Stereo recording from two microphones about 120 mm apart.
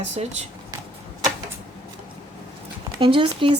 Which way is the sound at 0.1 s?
65° right (ahead or behind).